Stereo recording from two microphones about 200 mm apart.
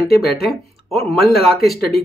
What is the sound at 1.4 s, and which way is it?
Speech, centre (ahead or behind).